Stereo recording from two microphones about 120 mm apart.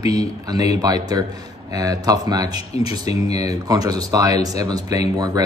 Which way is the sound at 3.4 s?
30° right (ahead or behind).